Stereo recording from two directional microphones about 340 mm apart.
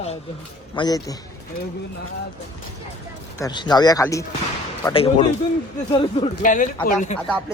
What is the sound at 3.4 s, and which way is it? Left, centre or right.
A man's voice, centre.